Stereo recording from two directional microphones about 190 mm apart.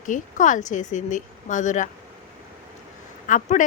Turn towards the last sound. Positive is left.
turn(degrees=40)  # may be behind; listen again after turning